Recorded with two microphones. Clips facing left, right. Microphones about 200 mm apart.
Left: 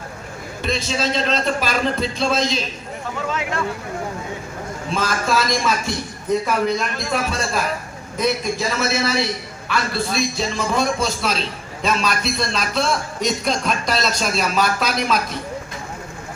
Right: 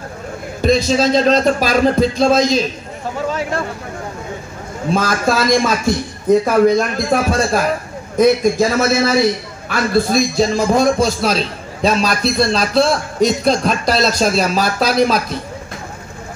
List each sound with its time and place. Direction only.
0.6 s a man's voice: 40° right (ahead or behind)
3.3 s a sound: 35° right (ahead or behind)
4.9 s a man's voice: 45° right (ahead or behind)
6.4 s a man's voice: 45° right (ahead or behind)